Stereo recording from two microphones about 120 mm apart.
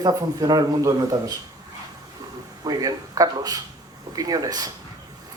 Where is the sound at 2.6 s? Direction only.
30° right (ahead or behind).